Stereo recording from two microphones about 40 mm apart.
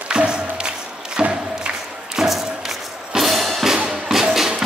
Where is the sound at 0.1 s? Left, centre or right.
Right.